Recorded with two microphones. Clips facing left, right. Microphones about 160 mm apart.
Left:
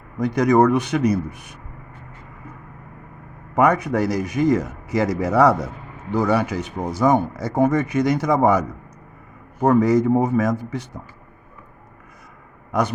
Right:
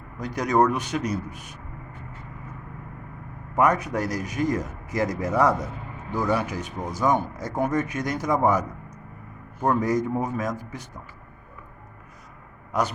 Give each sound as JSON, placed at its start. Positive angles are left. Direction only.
{"t": 0.2, "sound": "a man's voice", "side_deg": 65}
{"t": 3.5, "sound": "speech", "side_deg": 65}
{"t": 9.6, "sound": "speech", "side_deg": 80}